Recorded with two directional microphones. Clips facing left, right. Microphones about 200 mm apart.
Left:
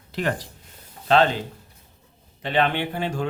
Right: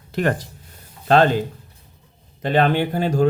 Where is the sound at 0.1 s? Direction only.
50° right (ahead or behind).